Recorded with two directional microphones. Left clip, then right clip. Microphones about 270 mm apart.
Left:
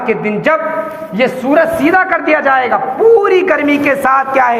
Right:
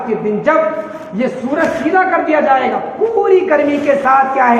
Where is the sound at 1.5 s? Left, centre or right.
Left.